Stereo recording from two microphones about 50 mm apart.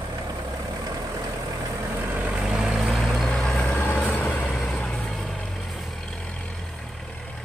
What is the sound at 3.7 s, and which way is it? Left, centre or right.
Vehicle, left.